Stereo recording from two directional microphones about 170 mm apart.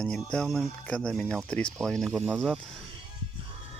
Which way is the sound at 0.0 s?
5° left (ahead or behind).